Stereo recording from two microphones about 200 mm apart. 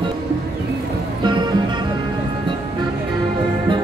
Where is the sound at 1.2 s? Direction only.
20° right (ahead or behind).